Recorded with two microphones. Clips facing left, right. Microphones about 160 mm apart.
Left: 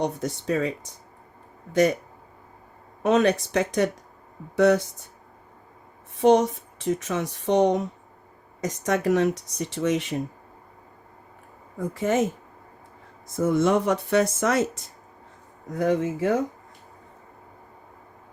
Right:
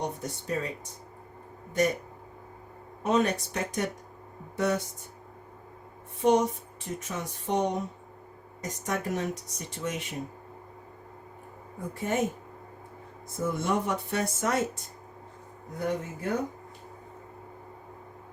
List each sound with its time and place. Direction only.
0.0 s speech: 90° left
1.7 s speech: 90° left
3.0 s speech: 90° left
6.1 s speech: 90° left
11.9 s speech: 90° left
13.2 s speech: 90° left
15.8 s speech: 90° left